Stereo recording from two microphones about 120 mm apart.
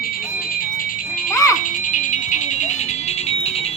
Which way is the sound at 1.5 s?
90° left.